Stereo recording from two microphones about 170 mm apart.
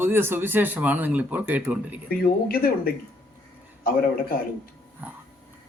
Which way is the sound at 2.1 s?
60° left (ahead or behind).